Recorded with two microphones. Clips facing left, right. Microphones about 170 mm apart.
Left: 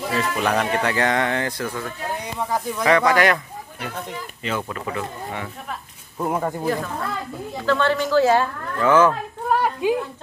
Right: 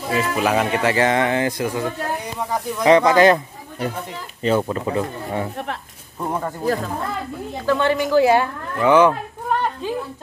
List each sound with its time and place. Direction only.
0.1 s speech: 5° right (ahead or behind); by 3.3 s 25° right (ahead or behind)
4.4 s speech: 30° right (ahead or behind)
6.1 s speech: 5° left (ahead or behind)
7.6 s speech: 15° right (ahead or behind)
9.5 s a sound: 10° left (ahead or behind)